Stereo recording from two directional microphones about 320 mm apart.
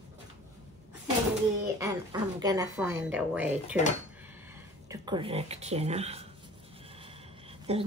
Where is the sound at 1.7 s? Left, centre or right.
Centre.